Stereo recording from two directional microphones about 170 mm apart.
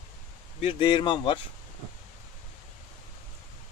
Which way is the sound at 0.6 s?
30° left (ahead or behind).